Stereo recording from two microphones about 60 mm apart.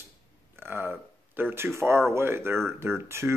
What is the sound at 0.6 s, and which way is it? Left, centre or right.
Speech, right.